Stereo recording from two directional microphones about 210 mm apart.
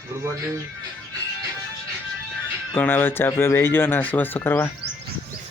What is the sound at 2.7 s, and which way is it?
Speech, 10° left (ahead or behind).